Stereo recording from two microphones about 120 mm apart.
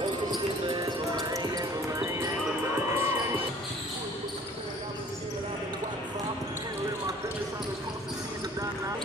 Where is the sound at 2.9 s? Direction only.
20° right (ahead or behind).